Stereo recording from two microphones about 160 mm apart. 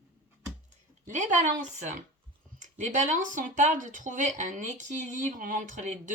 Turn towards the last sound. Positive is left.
turn(degrees=-50)  # may be behind; listen again after turning